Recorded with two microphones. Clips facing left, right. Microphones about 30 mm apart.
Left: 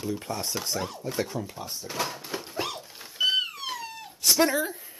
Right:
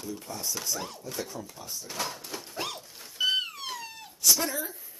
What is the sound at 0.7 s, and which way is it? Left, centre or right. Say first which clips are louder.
Speech: left 5 dB; centre.